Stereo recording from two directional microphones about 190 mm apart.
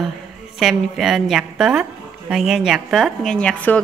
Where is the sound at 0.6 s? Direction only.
Centre (ahead or behind).